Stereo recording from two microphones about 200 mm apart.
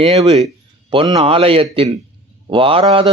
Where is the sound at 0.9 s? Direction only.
20° right (ahead or behind).